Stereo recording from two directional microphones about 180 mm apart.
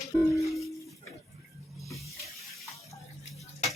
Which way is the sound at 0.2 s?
15° left (ahead or behind).